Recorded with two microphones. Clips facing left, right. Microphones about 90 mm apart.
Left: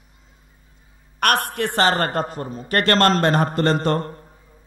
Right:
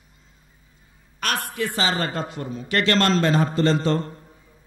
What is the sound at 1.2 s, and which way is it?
A man's voice, 60° left (ahead or behind).